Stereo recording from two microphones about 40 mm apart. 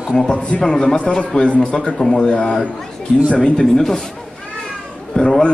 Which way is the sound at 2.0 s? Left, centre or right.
Centre.